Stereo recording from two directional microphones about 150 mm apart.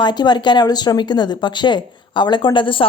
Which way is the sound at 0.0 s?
30° left (ahead or behind).